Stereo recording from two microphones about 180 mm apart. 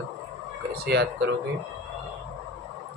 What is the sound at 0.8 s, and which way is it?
Speech, 60° right (ahead or behind).